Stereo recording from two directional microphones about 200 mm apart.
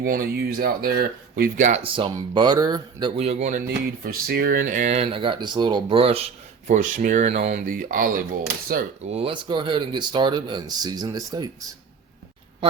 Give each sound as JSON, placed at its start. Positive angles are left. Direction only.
{"t": 0.0, "sound": "speech", "side_deg": -45}
{"t": 3.2, "sound": "speech", "side_deg": -35}
{"t": 4.0, "sound": "speech", "side_deg": -50}
{"t": 9.0, "sound": "speech", "side_deg": -30}